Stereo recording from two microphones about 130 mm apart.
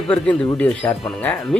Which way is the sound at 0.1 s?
10° left (ahead or behind).